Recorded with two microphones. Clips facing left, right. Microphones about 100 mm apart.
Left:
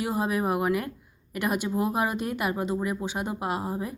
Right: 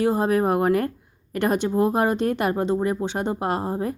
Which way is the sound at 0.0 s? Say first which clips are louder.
Right 7 dB; 40° right (ahead or behind).